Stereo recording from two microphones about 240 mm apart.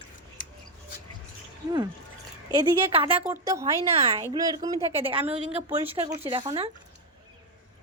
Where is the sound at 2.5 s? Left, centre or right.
Right.